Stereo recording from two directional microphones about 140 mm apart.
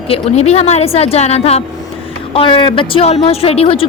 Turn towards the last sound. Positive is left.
turn(degrees=45)  # may be behind; listen again after turning